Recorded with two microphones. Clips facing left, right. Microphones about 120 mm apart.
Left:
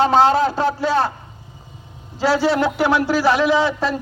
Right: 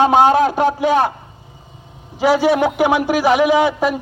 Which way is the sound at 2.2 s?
15° right (ahead or behind).